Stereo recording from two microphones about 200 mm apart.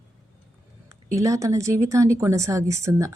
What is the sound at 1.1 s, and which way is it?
Speech, 15° right (ahead or behind).